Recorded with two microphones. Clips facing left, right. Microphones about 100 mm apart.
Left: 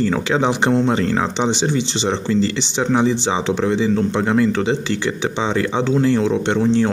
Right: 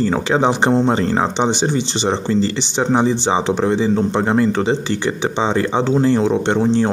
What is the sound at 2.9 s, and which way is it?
Speech, 40° right (ahead or behind).